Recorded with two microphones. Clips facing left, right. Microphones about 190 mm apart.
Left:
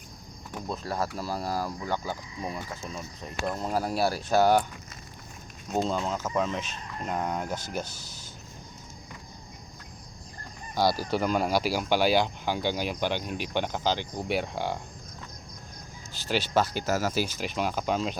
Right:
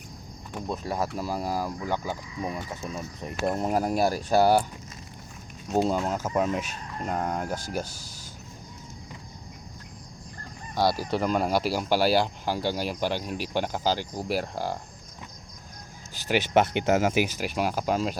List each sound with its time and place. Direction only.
0.5 s speech: 10° right (ahead or behind)
5.7 s speech: 10° right (ahead or behind)
7.0 s speech: centre (ahead or behind)
10.8 s speech: centre (ahead or behind)
16.2 s speech: 15° right (ahead or behind)
17.4 s speech: 10° right (ahead or behind)